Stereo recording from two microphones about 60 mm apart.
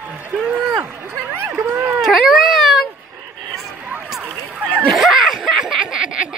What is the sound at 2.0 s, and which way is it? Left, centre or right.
Baby cry, centre.